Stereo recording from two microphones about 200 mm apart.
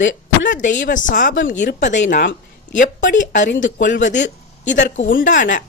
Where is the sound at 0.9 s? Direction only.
40° left (ahead or behind).